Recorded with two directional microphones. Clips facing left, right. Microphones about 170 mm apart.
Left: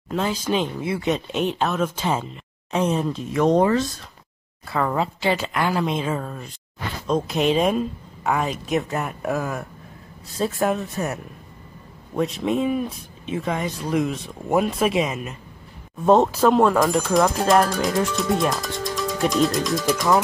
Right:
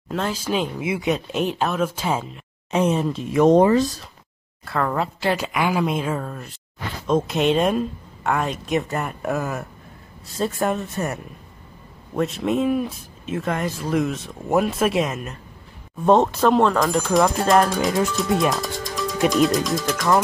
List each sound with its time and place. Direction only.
0.1 s speech: centre (ahead or behind)
3.3 s speech: 20° right (ahead or behind)
4.6 s speech: centre (ahead or behind)